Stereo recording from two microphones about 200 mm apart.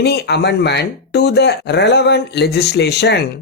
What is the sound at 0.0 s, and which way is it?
Speech, 55° left (ahead or behind).